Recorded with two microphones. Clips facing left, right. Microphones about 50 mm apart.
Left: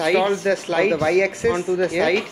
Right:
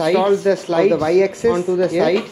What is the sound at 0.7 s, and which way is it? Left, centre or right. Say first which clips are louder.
Speech: right 4 dB; centre.